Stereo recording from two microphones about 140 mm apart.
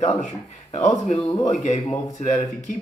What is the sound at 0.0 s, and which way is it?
Speech, 55° left (ahead or behind).